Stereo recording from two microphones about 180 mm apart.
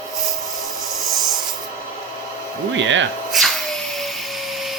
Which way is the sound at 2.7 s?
90° right.